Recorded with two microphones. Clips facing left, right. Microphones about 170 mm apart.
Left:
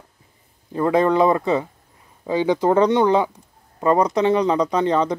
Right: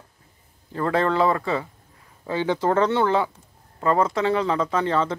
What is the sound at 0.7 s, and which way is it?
Speech, 15° left (ahead or behind).